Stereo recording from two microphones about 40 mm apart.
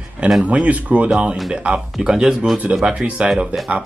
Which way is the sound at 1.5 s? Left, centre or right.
Right.